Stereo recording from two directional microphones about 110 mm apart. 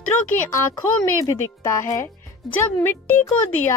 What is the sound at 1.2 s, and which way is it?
A woman's voice, 30° left (ahead or behind).